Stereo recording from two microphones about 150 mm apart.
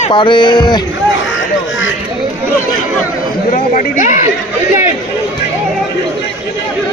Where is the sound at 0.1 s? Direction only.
30° left (ahead or behind).